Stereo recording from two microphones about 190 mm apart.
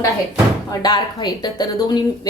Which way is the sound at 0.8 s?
20° left (ahead or behind).